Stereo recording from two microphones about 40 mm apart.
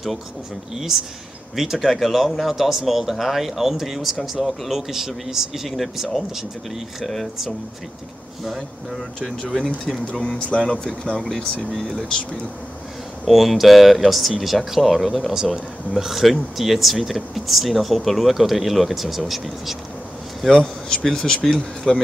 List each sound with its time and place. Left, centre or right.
0.7 s speech: centre
5.7 s speech: centre
8.5 s speech: centre
10.1 s speech: left
11.7 s speech: centre
13.2 s speech: centre
20.5 s speech: centre